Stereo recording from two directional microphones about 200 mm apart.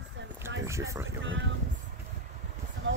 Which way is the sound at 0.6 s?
15° right (ahead or behind).